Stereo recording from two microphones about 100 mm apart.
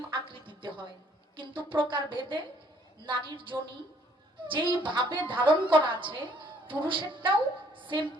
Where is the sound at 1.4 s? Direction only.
55° right (ahead or behind).